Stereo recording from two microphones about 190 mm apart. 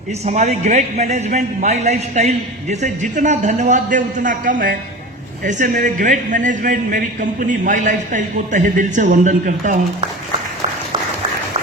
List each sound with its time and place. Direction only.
0.3 s a man's voice: 35° right (ahead or behind)